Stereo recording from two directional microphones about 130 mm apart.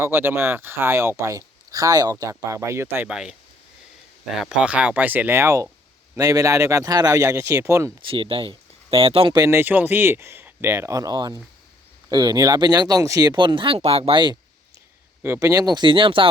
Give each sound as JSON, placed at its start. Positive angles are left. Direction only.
{"t": 0.0, "sound": "speech", "side_deg": -15}
{"t": 3.1, "sound": "speech", "side_deg": -5}
{"t": 4.4, "sound": "speech", "side_deg": -5}
{"t": 8.1, "sound": "speech", "side_deg": -45}
{"t": 9.3, "sound": "speech", "side_deg": -20}
{"t": 15.2, "sound": "speech", "side_deg": -20}